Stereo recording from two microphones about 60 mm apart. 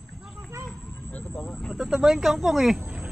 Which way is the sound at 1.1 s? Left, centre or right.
Left.